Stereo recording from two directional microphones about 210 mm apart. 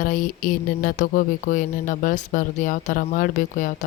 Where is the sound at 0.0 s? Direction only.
40° left (ahead or behind).